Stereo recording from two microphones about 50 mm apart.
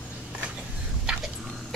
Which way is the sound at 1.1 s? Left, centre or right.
Centre.